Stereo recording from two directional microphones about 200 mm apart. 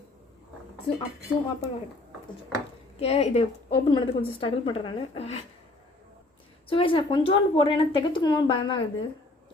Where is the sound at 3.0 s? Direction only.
30° left (ahead or behind).